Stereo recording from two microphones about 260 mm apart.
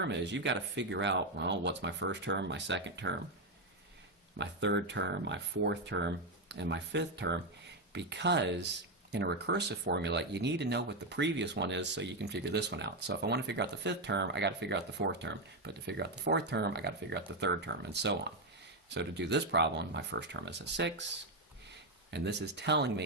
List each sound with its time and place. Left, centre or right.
0.0 s speech: right
4.4 s speech: right
22.1 s speech: right